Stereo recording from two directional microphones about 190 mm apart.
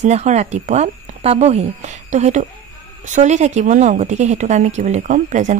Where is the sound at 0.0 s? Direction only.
35° right (ahead or behind).